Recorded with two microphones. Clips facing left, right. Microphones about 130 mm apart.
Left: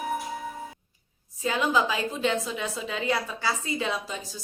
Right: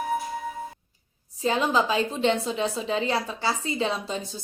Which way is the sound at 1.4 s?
30° right (ahead or behind).